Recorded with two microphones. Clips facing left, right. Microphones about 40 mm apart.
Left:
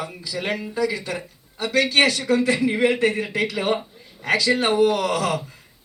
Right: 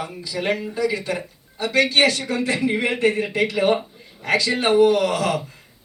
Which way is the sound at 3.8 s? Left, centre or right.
Centre.